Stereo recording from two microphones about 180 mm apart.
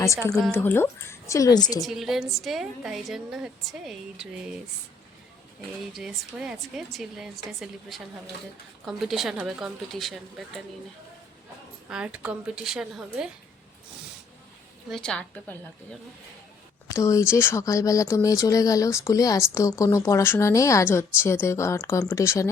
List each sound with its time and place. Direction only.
0.5 s speech: 10° left (ahead or behind)
1.8 s a woman's voice: centre (ahead or behind)
5.9 s a woman's voice: centre (ahead or behind)
11.9 s a woman's voice: 5° right (ahead or behind)
14.8 s a woman's voice: centre (ahead or behind)
16.9 s speech: 15° left (ahead or behind)